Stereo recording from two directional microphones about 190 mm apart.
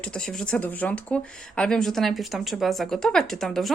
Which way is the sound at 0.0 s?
5° left (ahead or behind).